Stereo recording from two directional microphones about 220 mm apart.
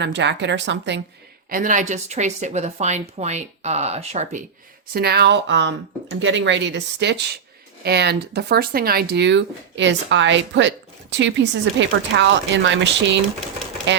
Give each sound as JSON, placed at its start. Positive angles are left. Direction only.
{"t": 0.0, "sound": "speech", "side_deg": -50}
{"t": 1.5, "sound": "a woman's voice", "side_deg": -40}
{"t": 4.9, "sound": "speech", "side_deg": -45}